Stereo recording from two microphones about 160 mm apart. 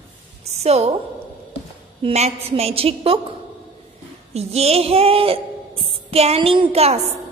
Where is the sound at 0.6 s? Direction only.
40° right (ahead or behind).